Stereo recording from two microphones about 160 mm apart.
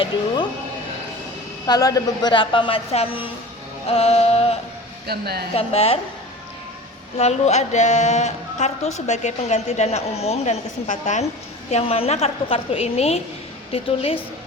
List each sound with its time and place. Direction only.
1.6 s a woman's voice: 25° left (ahead or behind); by 4.5 s 40° left (ahead or behind)
5.0 s a woman's voice: 80° right
5.5 s a woman's voice: 40° left (ahead or behind)
7.2 s a woman's voice: 45° left (ahead or behind)
11.7 s a woman's voice: 35° left (ahead or behind)